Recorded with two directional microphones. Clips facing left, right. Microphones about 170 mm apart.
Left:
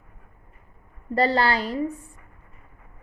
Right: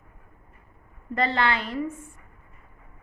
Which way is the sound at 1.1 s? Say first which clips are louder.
Left 4 dB; 35° left (ahead or behind).